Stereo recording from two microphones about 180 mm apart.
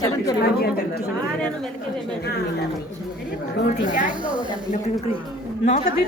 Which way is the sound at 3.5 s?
50° left (ahead or behind).